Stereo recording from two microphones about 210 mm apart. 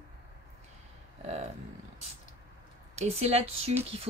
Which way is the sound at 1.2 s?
30° right (ahead or behind).